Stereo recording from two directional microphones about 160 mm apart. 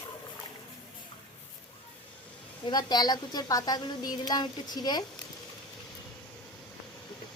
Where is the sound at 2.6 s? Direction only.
25° left (ahead or behind).